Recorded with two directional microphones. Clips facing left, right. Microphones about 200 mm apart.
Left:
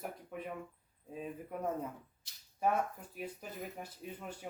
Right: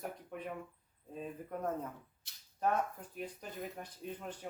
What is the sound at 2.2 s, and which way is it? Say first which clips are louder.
Speech: right 1 dB; 60° right (ahead or behind).